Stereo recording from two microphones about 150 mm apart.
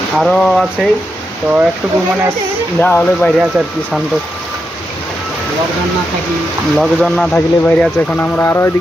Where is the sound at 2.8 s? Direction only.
15° left (ahead or behind).